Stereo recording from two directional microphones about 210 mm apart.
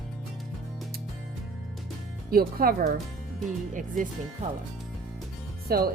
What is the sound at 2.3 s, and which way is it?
A woman's voice, 45° right (ahead or behind).